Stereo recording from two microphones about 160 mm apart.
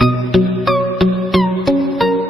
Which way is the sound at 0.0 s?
Centre (ahead or behind).